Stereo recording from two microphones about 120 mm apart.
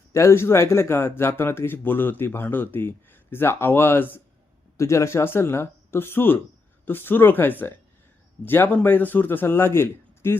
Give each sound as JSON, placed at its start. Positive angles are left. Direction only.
{"t": 0.1, "sound": "a man's voice", "side_deg": 25}